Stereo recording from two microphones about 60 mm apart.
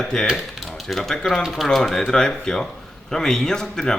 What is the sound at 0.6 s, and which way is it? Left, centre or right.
Speech, centre.